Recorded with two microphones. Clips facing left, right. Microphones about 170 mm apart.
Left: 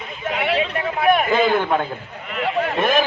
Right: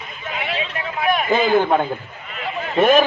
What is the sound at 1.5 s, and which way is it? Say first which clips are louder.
Speech: right 3 dB; 30° right (ahead or behind).